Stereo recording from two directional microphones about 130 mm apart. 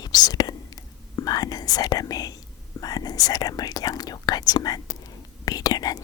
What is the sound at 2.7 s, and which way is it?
Speech, 30° left (ahead or behind).